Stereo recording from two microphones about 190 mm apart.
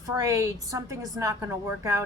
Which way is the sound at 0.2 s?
15° right (ahead or behind).